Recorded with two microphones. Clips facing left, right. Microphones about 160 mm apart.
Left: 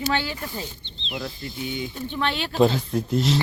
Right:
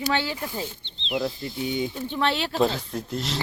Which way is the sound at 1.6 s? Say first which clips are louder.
Right 3 dB; 35° right (ahead or behind).